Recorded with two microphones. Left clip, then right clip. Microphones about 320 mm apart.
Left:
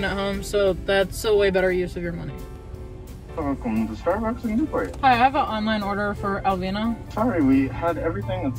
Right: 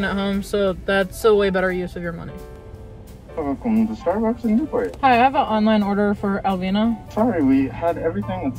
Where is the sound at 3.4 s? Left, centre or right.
Right.